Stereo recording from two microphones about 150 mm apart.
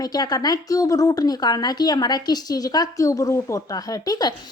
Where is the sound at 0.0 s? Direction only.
25° left (ahead or behind).